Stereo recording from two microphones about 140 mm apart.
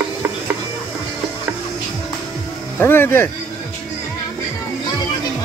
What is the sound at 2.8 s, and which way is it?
Speech, 15° left (ahead or behind).